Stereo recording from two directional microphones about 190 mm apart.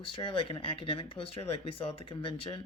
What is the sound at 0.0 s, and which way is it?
Speech, 30° left (ahead or behind).